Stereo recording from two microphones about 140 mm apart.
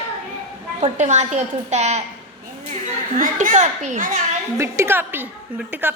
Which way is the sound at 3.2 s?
65° right (ahead or behind).